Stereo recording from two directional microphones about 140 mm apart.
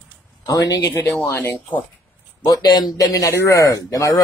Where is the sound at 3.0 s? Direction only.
20° left (ahead or behind).